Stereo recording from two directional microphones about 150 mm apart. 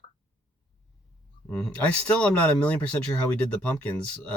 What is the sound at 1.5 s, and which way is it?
Speech, 10° left (ahead or behind).